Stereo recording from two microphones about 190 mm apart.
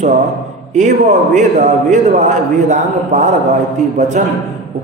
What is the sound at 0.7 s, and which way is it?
A man's voice, 40° right (ahead or behind).